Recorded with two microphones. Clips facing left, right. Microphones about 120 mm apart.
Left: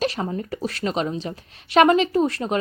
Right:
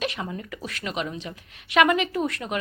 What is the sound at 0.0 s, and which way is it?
A woman's voice, 35° left (ahead or behind).